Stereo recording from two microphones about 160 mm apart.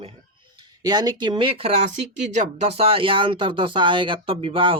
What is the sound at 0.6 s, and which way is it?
Speech, 25° right (ahead or behind).